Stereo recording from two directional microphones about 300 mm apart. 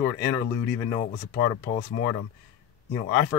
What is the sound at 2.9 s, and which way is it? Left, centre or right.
Speech, centre.